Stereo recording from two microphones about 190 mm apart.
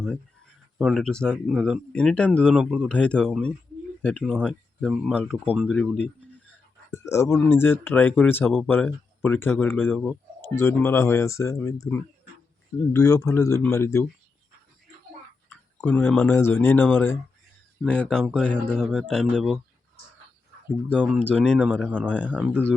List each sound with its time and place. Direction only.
0.8 s speech: centre (ahead or behind)
15.4 s tick: 10° left (ahead or behind)
16.3 s speech: 10° left (ahead or behind)
20.9 s speech: 5° left (ahead or behind)
22.3 s speech: 5° right (ahead or behind)